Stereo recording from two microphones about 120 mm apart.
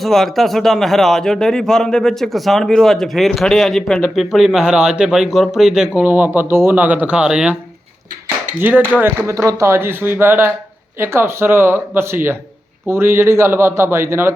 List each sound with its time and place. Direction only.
0.0 s a man's voice: centre (ahead or behind)
8.6 s speech: 15° right (ahead or behind)